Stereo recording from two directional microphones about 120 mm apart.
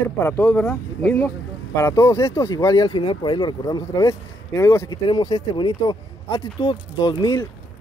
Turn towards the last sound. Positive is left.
turn(degrees=40)  # may be behind; listen again after turning